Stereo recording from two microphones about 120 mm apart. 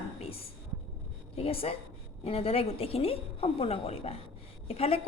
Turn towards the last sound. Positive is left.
turn(degrees=55)  # may be behind; listen again after turning